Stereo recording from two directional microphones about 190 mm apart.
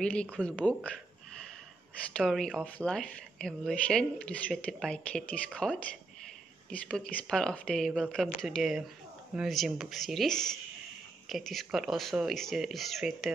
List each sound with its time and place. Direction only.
0.0 s speech: 5° left (ahead or behind)
0.7 s a sound: 5° left (ahead or behind)
2.1 s speech: centre (ahead or behind)